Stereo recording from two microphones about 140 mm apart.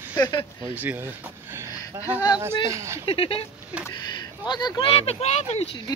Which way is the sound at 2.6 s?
20° right (ahead or behind).